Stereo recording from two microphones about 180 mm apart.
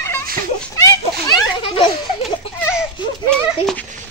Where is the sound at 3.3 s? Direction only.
5° left (ahead or behind).